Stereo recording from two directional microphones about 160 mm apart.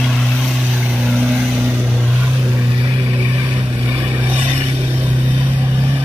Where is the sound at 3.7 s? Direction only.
10° right (ahead or behind).